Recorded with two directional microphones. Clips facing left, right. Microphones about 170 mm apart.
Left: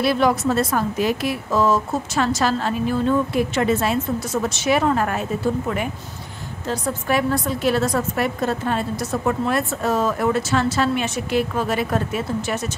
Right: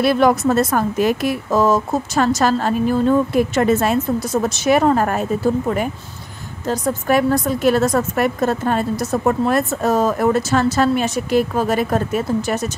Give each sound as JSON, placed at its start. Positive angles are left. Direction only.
{"t": 0.0, "sound": "a woman's voice", "side_deg": -50}
{"t": 6.7, "sound": "a woman's voice", "side_deg": -45}